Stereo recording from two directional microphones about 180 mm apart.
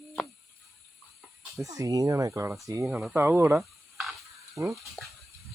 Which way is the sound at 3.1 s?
15° right (ahead or behind).